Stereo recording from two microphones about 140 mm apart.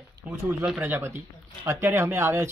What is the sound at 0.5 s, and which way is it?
Speech, 15° right (ahead or behind).